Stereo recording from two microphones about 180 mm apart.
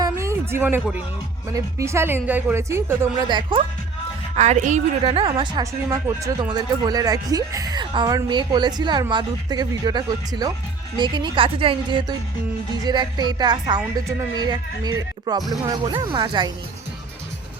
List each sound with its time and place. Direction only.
0.0 s a sound: 15° right (ahead or behind)
1.5 s speech: 15° right (ahead or behind)
3.2 s a woman's voice: 25° right (ahead or behind)
4.4 s a woman's voice: 40° right (ahead or behind)